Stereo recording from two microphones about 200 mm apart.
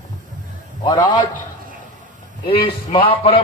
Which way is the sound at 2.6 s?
25° left (ahead or behind).